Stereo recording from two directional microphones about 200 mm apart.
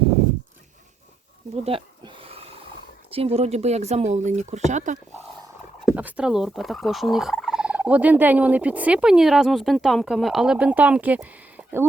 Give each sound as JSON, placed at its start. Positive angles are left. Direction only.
{"t": 1.5, "sound": "a sound", "side_deg": -30}
{"t": 3.1, "sound": "speech", "side_deg": -30}
{"t": 5.8, "sound": "speech", "side_deg": -5}